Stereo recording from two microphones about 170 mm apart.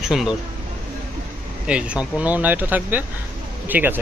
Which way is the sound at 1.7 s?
5° right (ahead or behind).